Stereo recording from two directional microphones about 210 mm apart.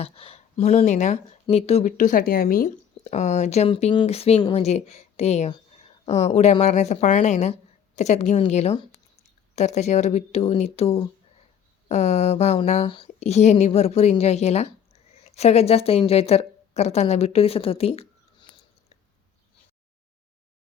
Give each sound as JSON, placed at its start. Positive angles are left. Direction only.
{"t": 0.0, "sound": "speech", "side_deg": 25}
{"t": 2.6, "sound": "a woman's voice", "side_deg": 35}